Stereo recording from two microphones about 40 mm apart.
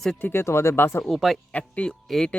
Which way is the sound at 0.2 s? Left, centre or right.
Left.